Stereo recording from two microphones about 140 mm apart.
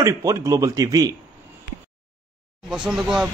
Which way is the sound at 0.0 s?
20° right (ahead or behind).